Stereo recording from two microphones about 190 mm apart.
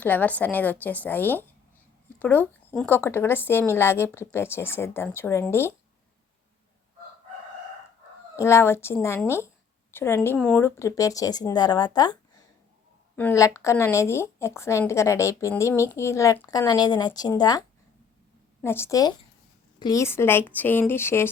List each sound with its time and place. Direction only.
0.0 s speech: 10° left (ahead or behind)
8.4 s a woman's voice: 15° left (ahead or behind)
13.1 s speech: 15° left (ahead or behind)